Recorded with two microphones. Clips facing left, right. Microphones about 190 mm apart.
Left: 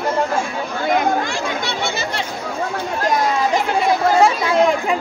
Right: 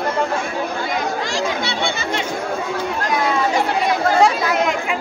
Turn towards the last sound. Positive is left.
turn(degrees=30)  # may be behind; listen again after turning